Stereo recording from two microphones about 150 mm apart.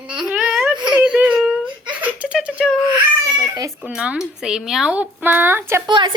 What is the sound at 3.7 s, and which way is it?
Speech, 5° right (ahead or behind).